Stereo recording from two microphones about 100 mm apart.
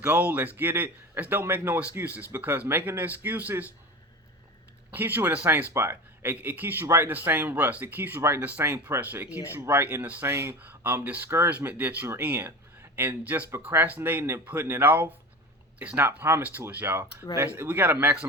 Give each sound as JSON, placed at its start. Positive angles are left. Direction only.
{"t": 0.0, "sound": "speech", "side_deg": -15}
{"t": 4.9, "sound": "speech", "side_deg": -20}
{"t": 16.0, "sound": "speech", "side_deg": -25}